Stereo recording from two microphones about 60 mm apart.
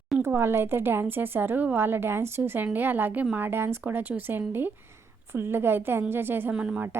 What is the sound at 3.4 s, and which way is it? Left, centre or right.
A woman's voice, right.